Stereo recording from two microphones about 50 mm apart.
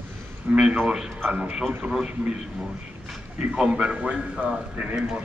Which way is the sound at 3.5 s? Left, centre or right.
Centre.